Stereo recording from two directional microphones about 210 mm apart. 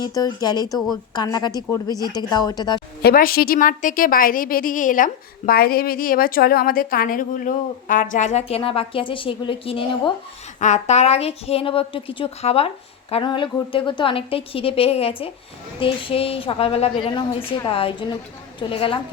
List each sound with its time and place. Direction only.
0.0 s a woman's voice: 15° left (ahead or behind)
3.0 s a woman's voice: 45° left (ahead or behind); by 18.9 s 25° left (ahead or behind)